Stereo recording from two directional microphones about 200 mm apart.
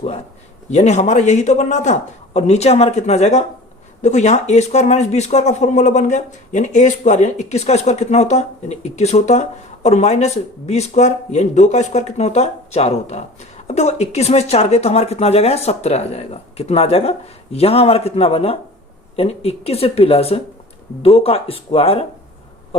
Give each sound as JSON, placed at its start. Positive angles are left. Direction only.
{"t": 0.7, "sound": "speech", "side_deg": 35}